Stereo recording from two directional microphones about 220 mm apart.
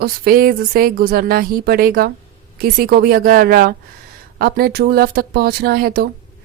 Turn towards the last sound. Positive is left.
turn(degrees=-45)  # may be behind; listen again after turning